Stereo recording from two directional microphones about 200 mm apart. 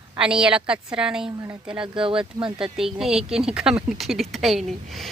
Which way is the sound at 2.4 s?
25° right (ahead or behind).